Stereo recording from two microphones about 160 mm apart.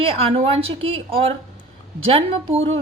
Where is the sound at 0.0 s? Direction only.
40° right (ahead or behind).